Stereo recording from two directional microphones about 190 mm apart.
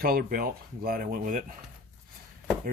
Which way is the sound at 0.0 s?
50° right (ahead or behind).